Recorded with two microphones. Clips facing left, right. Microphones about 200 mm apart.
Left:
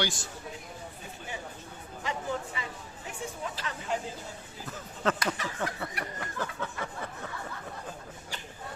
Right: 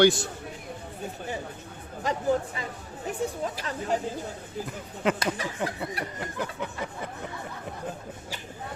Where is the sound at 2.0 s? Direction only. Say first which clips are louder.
Right 8 dB; 40° right (ahead or behind).